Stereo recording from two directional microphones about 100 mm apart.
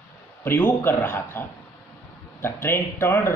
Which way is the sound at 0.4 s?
20° left (ahead or behind).